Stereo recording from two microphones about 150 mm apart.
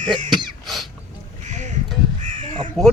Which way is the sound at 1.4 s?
55° right (ahead or behind).